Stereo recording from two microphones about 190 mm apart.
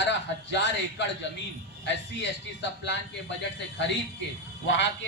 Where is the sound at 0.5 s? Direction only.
70° left (ahead or behind).